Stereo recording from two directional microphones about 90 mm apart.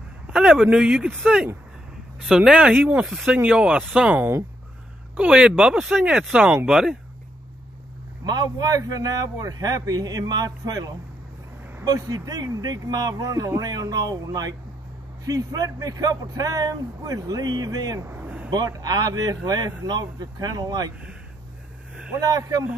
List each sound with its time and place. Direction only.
0.3 s speech: 10° right (ahead or behind)
8.2 s a man's voice: 50° right (ahead or behind)
18.0 s vehicle: 25° right (ahead or behind)
18.5 s a man's voice: 45° right (ahead or behind)
22.2 s speech: 40° right (ahead or behind)